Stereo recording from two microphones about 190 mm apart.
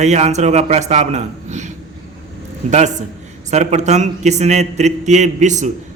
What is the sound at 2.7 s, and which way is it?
A man's voice, 35° right (ahead or behind).